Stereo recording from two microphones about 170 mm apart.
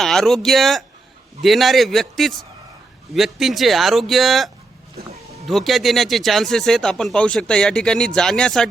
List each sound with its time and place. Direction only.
0.0 s speech: centre (ahead or behind)
5.0 s speech: 60° right (ahead or behind)
5.5 s speech: centre (ahead or behind)